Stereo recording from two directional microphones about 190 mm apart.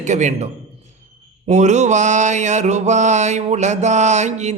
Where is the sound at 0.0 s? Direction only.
40° right (ahead or behind).